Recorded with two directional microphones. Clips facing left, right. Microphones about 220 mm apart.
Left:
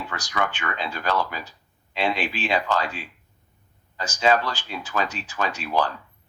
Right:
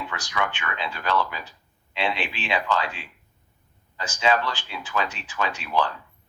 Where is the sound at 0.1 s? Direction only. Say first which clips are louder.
Left 3 dB; 40° left (ahead or behind).